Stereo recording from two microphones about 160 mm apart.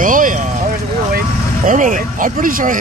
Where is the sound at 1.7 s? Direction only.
55° right (ahead or behind).